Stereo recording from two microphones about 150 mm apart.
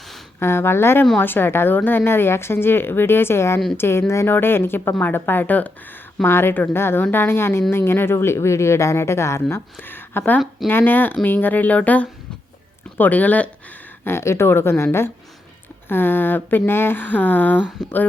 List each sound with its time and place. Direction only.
0.3 s speech: 15° left (ahead or behind)
15.9 s speech: 15° left (ahead or behind)